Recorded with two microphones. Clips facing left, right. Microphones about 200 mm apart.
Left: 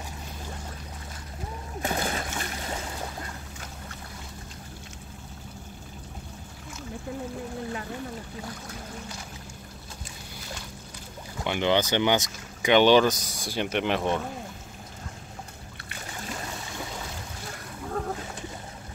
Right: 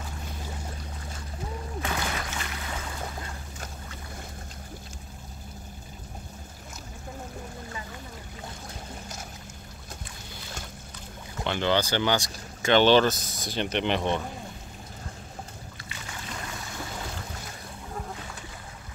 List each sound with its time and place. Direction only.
1.8 s splash: 40° left (ahead or behind)
11.4 s speech: 15° left (ahead or behind)